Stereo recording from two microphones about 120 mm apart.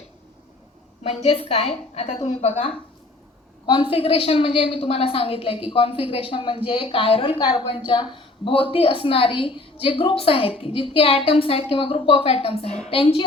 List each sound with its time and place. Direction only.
1.0 s a woman's voice: 55° left (ahead or behind)
3.7 s a woman's voice: 45° left (ahead or behind)